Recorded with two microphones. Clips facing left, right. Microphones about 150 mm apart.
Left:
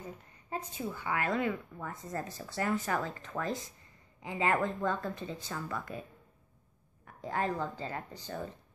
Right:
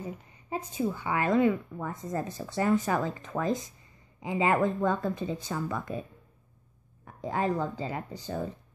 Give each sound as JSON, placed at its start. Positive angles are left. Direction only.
{"t": 0.5, "sound": "a woman's voice", "side_deg": -15}
{"t": 7.2, "sound": "a woman's voice", "side_deg": -15}